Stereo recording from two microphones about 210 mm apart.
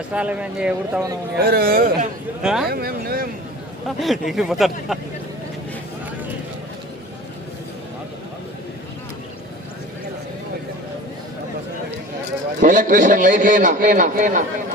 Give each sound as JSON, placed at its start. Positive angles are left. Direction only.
{"t": 0.1, "sound": "speech", "side_deg": -5}
{"t": 1.4, "sound": "speech", "side_deg": -45}
{"t": 2.4, "sound": "speech", "side_deg": -5}
{"t": 2.6, "sound": "speech", "side_deg": -45}
{"t": 3.8, "sound": "speech", "side_deg": 0}
{"t": 12.5, "sound": "a man's voice", "side_deg": -40}